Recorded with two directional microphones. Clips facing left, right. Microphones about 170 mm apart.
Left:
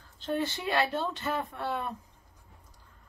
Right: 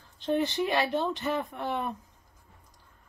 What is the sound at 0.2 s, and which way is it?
Speech, 20° right (ahead or behind).